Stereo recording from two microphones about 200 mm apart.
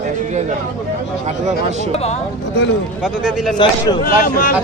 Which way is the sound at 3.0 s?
Centre (ahead or behind).